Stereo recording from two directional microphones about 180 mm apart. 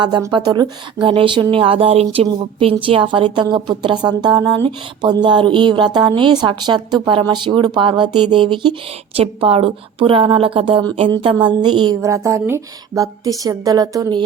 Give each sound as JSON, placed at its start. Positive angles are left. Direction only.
{"t": 0.0, "sound": "a woman's voice", "side_deg": -25}